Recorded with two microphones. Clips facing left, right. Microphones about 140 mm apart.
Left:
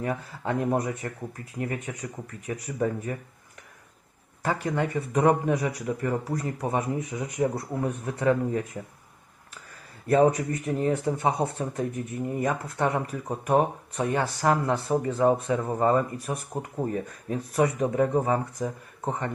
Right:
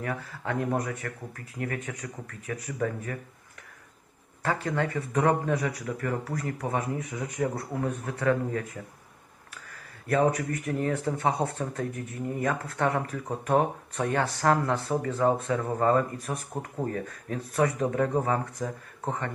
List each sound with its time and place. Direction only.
0.0 s speech: 25° left (ahead or behind)
4.6 s speech: 15° left (ahead or behind)
10.1 s speech: 25° left (ahead or behind); by 16.8 s 10° left (ahead or behind)
16.8 s speech: 20° left (ahead or behind)